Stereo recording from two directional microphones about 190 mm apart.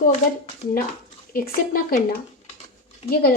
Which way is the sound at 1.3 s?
50° left (ahead or behind).